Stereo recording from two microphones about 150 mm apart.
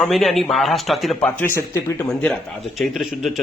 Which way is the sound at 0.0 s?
Centre (ahead or behind).